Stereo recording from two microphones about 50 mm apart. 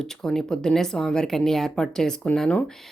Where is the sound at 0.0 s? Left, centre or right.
Centre.